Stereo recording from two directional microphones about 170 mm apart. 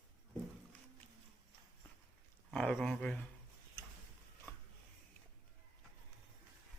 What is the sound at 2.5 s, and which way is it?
Speech, 5° left (ahead or behind).